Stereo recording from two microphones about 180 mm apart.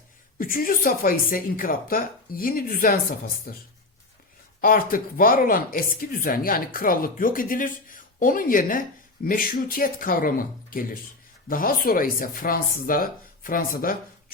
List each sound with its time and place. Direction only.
0.3 s speech: 50° left (ahead or behind)
4.6 s speech: 50° left (ahead or behind)